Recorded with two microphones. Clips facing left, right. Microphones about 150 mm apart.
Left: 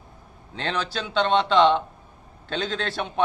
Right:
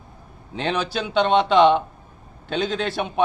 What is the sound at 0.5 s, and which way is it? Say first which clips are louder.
A man's voice: right 4 dB; 15° right (ahead or behind).